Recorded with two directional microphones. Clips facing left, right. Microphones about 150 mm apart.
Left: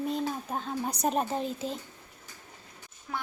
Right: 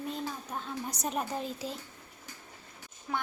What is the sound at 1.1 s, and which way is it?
Speech, 25° left (ahead or behind).